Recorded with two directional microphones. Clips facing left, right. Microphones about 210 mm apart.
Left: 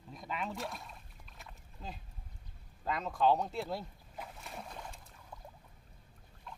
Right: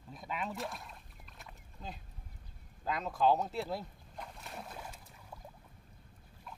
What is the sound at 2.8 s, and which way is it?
Boat, centre (ahead or behind).